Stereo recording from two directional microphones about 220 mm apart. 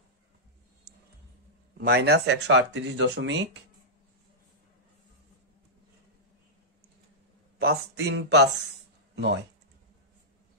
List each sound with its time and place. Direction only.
1.8 s speech: 50° right (ahead or behind)
7.5 s speech: 45° right (ahead or behind)